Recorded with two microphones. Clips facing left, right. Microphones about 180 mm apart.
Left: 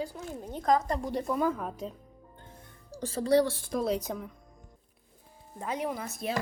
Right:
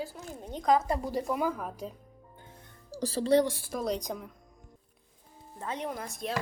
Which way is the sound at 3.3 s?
20° right (ahead or behind).